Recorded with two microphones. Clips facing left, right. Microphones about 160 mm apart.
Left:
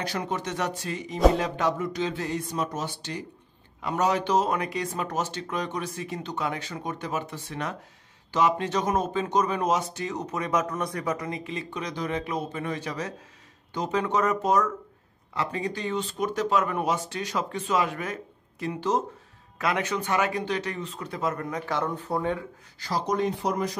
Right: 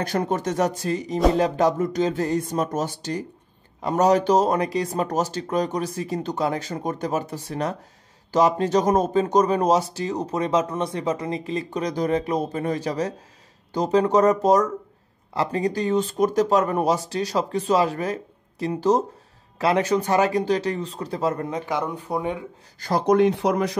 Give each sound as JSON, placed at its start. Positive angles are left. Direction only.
{"t": 0.0, "sound": "speech", "side_deg": -50}
{"t": 22.8, "sound": "speech", "side_deg": -55}